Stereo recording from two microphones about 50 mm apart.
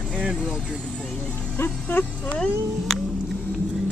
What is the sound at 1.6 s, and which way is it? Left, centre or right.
Speech, left.